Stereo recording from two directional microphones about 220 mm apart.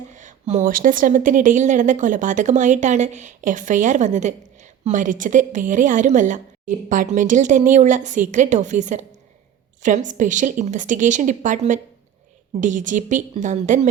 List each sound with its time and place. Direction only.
0.1 s a woman's voice: 35° right (ahead or behind)